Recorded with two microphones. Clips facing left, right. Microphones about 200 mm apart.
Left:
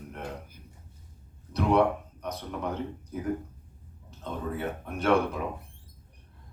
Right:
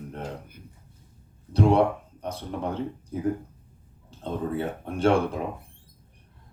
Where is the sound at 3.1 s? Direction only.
30° right (ahead or behind).